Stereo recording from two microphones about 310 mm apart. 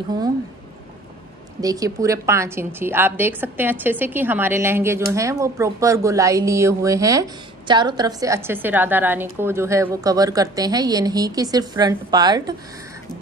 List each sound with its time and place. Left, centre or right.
1.6 s a woman's voice: centre